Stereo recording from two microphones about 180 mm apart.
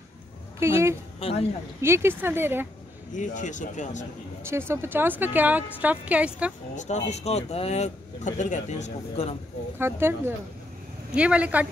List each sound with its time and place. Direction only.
0.6 s a woman's voice: 15° right (ahead or behind)
1.2 s speech: 30° left (ahead or behind)
1.8 s a woman's voice: 15° right (ahead or behind)
3.2 s speech: 45° left (ahead or behind)
4.5 s a woman's voice: 15° right (ahead or behind)
6.7 s speech: 40° left (ahead or behind)
9.8 s a woman's voice: 15° right (ahead or behind)